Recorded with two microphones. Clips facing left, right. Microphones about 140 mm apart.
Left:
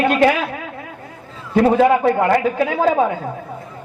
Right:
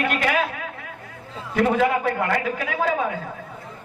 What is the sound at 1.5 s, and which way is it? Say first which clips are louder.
A woman's voice: left 7 dB; 30° left (ahead or behind).